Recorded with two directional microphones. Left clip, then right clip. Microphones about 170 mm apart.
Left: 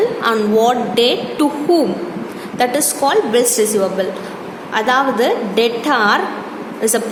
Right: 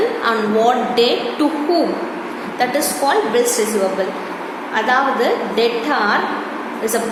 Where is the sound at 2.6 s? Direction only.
45° left (ahead or behind).